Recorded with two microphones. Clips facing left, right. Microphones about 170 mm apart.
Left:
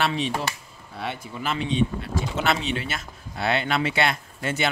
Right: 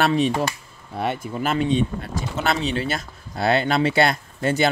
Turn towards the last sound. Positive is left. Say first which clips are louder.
# right 6 dB
turn(degrees=-35)  # may be behind; listen again after turning